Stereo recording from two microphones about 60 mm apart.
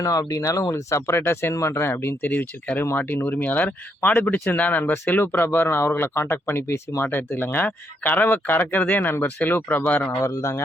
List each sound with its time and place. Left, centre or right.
0.0 s speech: left
2.3 s speech: left
10.2 s speech: left